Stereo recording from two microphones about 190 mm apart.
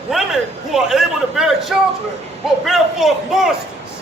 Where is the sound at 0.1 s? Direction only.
Centre (ahead or behind).